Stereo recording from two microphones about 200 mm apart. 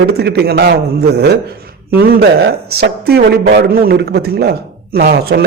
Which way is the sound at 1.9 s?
50° right (ahead or behind).